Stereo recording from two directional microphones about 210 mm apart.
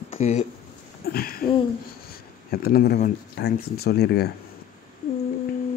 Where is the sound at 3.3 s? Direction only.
50° left (ahead or behind).